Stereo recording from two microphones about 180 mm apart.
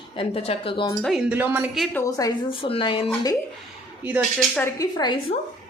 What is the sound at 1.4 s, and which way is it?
Speech, 10° right (ahead or behind).